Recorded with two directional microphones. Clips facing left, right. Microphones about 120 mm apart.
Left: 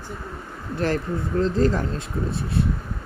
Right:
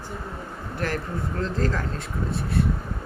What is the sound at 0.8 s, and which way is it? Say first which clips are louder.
Speech: left 5 dB; 25° left (ahead or behind).